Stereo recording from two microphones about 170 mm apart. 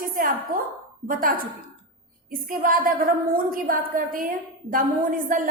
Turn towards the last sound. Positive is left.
turn(degrees=-55)  # may be behind; listen again after turning